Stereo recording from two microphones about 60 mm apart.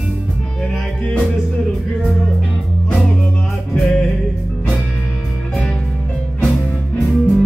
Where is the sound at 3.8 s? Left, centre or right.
Centre.